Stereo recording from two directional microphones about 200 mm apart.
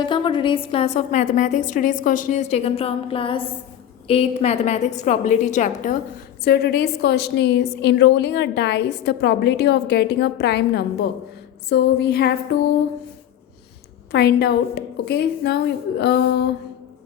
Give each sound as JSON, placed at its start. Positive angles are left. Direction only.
{"t": 0.0, "sound": "a woman's voice", "side_deg": 25}
{"t": 6.4, "sound": "a woman's voice", "side_deg": 50}
{"t": 14.1, "sound": "a woman's voice", "side_deg": 55}